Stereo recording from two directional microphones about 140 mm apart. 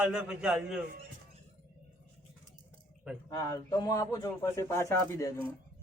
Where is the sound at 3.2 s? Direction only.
25° left (ahead or behind).